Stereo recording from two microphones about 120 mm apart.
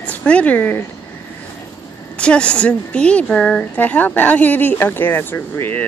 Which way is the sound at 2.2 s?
10° left (ahead or behind).